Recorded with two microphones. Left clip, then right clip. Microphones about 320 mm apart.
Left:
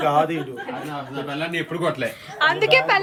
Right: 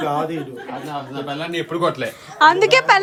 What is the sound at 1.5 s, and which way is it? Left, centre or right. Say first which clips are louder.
Speech: right 5 dB; right.